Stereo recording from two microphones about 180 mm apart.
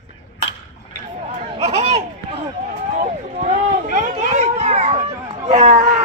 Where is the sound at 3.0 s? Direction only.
45° right (ahead or behind).